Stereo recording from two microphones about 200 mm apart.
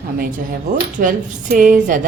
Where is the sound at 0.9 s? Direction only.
40° right (ahead or behind).